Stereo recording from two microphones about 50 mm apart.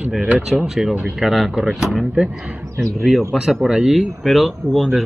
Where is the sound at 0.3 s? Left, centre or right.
Centre.